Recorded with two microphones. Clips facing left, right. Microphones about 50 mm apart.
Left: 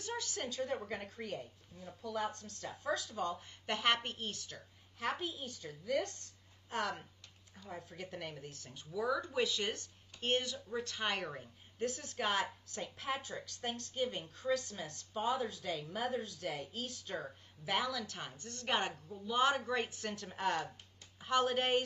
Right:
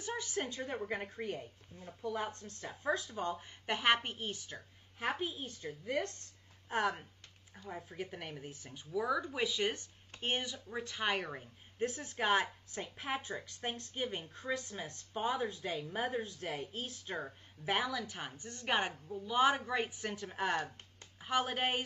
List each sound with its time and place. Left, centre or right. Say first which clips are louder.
0.0 s a woman's voice: right 2 dB; right
3.6 s speech: right 2 dB; centre
11.8 s speech: right 2 dB; right